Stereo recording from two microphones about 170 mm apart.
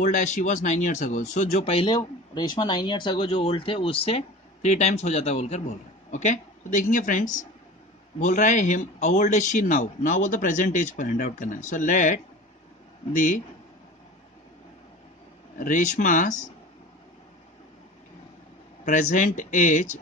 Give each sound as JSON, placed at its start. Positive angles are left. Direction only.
{"t": 0.0, "sound": "a man's voice", "side_deg": 45}
{"t": 15.6, "sound": "a man's voice", "side_deg": 50}
{"t": 18.9, "sound": "a man's voice", "side_deg": 45}